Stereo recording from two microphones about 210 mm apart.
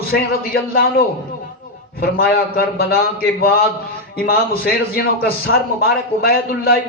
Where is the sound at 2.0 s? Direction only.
50° left (ahead or behind).